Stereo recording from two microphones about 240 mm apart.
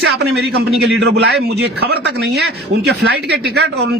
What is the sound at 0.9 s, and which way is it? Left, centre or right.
A man's voice, right.